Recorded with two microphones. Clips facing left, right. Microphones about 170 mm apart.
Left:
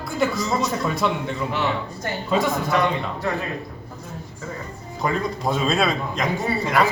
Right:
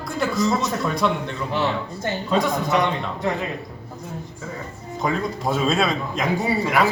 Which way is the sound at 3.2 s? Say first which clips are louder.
Right 1 dB; 20° right (ahead or behind).